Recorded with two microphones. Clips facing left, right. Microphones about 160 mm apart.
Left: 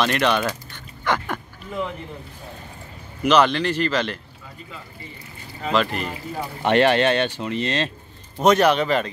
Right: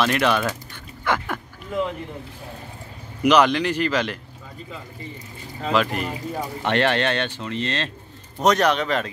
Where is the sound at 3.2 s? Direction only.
10° right (ahead or behind).